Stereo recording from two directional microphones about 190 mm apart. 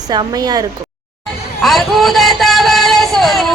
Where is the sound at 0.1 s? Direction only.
20° right (ahead or behind).